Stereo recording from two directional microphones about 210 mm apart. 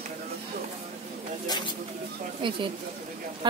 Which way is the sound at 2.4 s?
25° right (ahead or behind).